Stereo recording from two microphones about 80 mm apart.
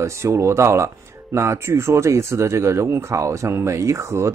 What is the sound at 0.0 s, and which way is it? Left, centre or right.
Speech, right.